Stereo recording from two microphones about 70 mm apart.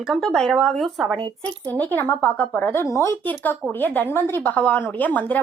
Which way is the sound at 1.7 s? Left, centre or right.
Left.